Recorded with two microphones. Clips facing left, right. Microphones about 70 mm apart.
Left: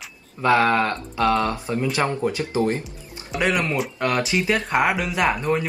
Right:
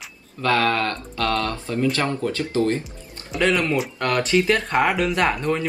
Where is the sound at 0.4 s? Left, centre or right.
Centre.